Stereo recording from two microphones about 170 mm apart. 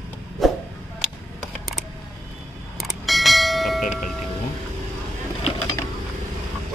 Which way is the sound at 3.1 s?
Centre (ahead or behind).